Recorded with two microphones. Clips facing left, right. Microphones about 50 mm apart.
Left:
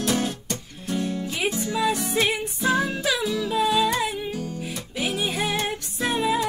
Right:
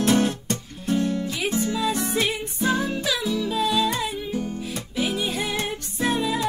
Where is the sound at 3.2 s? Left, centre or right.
Left.